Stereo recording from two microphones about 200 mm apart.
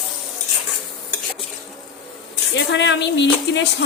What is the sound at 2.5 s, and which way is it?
Speech, 65° left (ahead or behind).